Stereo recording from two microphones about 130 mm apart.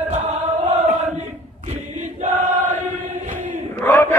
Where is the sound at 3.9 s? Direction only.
15° left (ahead or behind).